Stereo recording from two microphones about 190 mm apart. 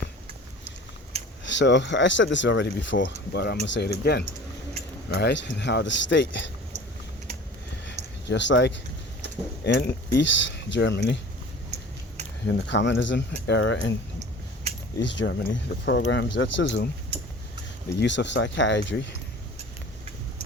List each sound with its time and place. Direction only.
1.5 s speech: 70° left (ahead or behind)
3.3 s speech: 60° left (ahead or behind)
8.3 s speech: 70° left (ahead or behind)
12.5 s speech: 70° left (ahead or behind)
15.0 s speech: 70° left (ahead or behind)
17.9 s speech: 70° left (ahead or behind)